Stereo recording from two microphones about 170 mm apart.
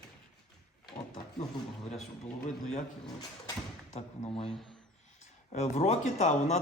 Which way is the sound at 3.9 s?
35° left (ahead or behind).